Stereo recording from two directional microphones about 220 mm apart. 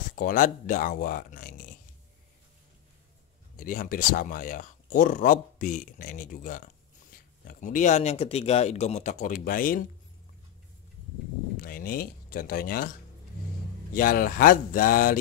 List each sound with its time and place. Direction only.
0.1 s speech: 40° left (ahead or behind)
3.5 s speech: 40° left (ahead or behind)
11.5 s speech: 40° left (ahead or behind)
13.9 s speech: 40° left (ahead or behind)